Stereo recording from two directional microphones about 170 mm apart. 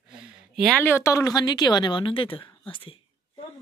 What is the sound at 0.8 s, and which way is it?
A woman's voice, 15° left (ahead or behind).